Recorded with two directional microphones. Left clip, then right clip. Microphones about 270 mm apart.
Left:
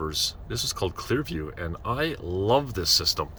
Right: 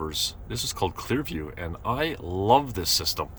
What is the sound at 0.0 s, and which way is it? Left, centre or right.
Speech, centre.